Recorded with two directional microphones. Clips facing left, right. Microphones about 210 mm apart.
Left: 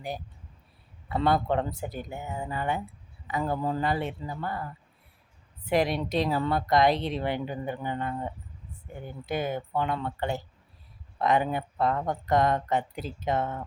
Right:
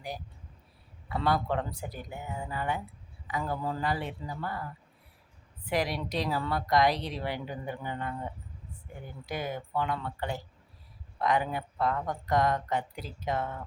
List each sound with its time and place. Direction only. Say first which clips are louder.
1.1 s a woman's voice: left 4 dB; 25° left (ahead or behind)
5.6 s a woman's voice: left 5 dB; 25° left (ahead or behind)